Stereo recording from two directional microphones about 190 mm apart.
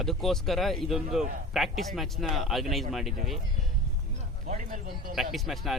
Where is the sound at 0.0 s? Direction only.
Centre (ahead or behind).